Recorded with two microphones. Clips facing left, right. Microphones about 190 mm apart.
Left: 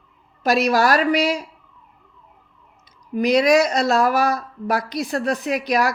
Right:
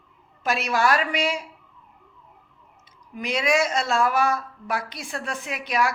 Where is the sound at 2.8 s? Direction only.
40° left (ahead or behind).